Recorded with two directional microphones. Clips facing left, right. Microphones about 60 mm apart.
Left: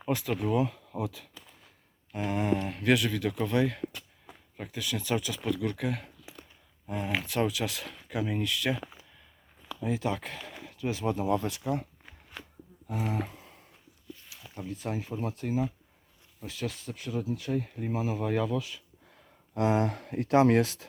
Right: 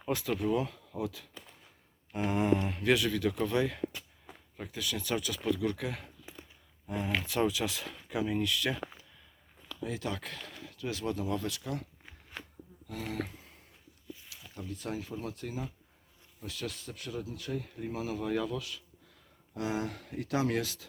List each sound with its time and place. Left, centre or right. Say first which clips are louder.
0.1 s speech: left 2 dB; centre
6.3 s a sound: right 1 dB; right
6.8 s speech: left 1 dB; centre
9.6 s speech: left 6 dB; centre
11.1 s speech: left 6 dB; left
14.4 s speech: left 4 dB; left
19.5 s speech: left 8 dB; left